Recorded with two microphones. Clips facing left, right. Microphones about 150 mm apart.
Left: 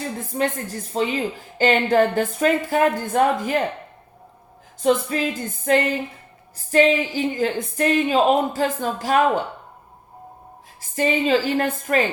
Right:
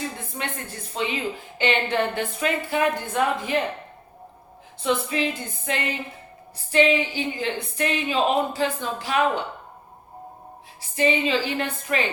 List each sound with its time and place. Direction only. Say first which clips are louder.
0.2 s a woman's voice: left 9 dB; 40° left (ahead or behind)
4.8 s speech: left 4 dB; 45° left (ahead or behind)
10.9 s speech: left 3 dB; 45° left (ahead or behind)